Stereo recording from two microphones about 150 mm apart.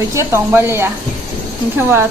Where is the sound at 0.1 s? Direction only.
20° right (ahead or behind).